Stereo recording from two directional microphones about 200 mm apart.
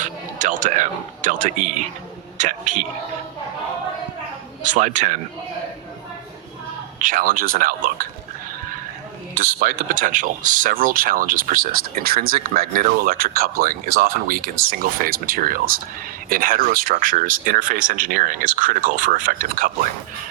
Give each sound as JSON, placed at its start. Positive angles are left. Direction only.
{"t": 0.0, "sound": "speech", "side_deg": -40}
{"t": 4.6, "sound": "speech", "side_deg": -40}
{"t": 7.0, "sound": "speech", "side_deg": -45}
{"t": 9.3, "sound": "speech", "side_deg": -45}